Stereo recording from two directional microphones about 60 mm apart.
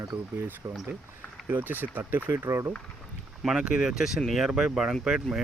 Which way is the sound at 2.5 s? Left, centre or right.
Right.